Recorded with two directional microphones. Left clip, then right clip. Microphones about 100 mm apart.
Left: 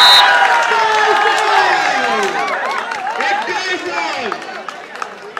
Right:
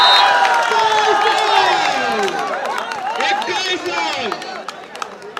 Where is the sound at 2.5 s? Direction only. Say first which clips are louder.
Left 3 dB; 15° right (ahead or behind).